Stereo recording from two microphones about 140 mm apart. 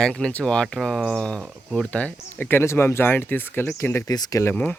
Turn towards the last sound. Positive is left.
turn(degrees=10)  # may be behind; listen again after turning